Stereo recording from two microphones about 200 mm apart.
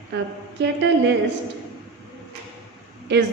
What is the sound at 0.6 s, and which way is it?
Speech, 60° right (ahead or behind).